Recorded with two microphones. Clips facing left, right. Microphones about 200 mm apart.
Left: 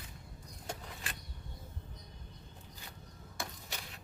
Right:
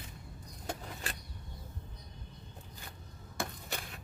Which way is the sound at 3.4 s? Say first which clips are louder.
Right 5 dB; 55° right (ahead or behind).